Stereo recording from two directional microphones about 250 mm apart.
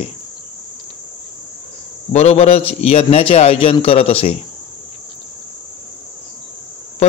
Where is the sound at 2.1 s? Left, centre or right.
Left.